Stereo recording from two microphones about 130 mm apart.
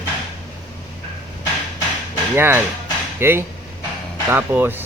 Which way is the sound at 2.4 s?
15° right (ahead or behind).